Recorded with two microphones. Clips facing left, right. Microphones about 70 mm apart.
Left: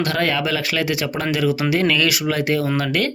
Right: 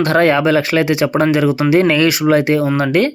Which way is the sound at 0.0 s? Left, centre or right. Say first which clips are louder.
Right 8 dB; right.